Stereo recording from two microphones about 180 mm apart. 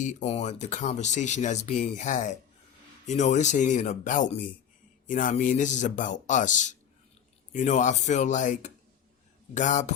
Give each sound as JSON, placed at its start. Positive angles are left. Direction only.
{"t": 0.0, "sound": "speech", "side_deg": 40}